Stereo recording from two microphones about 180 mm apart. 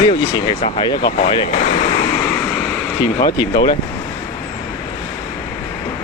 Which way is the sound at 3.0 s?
20° left (ahead or behind).